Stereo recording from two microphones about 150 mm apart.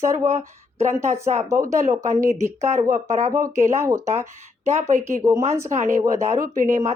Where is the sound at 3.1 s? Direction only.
50° right (ahead or behind).